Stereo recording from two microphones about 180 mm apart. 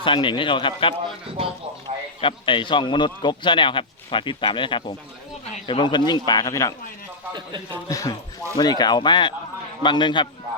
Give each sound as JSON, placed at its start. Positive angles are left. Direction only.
{"t": 0.0, "sound": "a man's voice", "side_deg": 30}
{"t": 2.2, "sound": "a man's voice", "side_deg": 25}
{"t": 7.3, "sound": "a man's voice", "side_deg": -25}
{"t": 7.9, "sound": "a man's voice", "side_deg": 20}